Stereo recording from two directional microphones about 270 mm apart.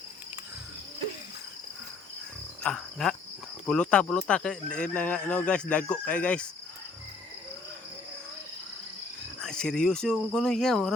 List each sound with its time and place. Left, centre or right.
2.6 s insect: centre
3.7 s speech: centre
9.4 s speech: centre